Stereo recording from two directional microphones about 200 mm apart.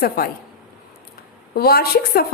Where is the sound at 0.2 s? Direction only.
50° left (ahead or behind).